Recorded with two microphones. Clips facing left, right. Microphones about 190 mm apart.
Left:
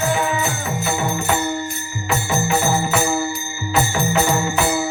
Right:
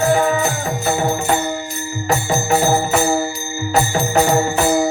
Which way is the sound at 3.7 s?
40° right (ahead or behind).